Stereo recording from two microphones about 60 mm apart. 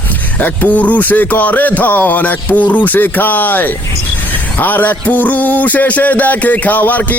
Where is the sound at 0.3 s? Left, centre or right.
Left.